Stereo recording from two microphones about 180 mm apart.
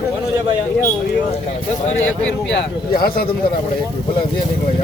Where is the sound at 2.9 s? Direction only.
55° left (ahead or behind).